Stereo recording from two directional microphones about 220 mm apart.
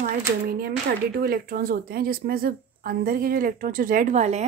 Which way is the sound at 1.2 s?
40° right (ahead or behind).